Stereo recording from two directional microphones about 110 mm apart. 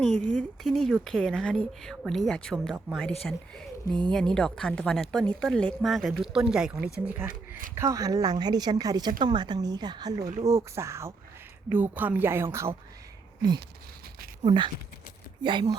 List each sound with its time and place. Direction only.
0.0 s speech: 10° left (ahead or behind); by 7.9 s 15° right (ahead or behind)
7.9 s a woman's voice: 30° right (ahead or behind)
14.4 s speech: 45° right (ahead or behind)